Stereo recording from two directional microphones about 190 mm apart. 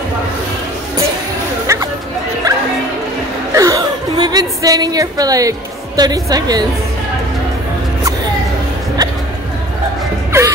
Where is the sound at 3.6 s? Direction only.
20° right (ahead or behind).